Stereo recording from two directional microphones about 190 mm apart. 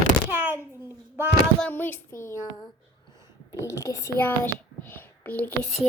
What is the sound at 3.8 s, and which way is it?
A child's voice, 15° left (ahead or behind).